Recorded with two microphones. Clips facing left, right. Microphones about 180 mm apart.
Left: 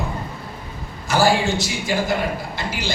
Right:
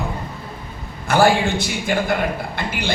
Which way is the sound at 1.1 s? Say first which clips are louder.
Right 2 dB; 55° right (ahead or behind).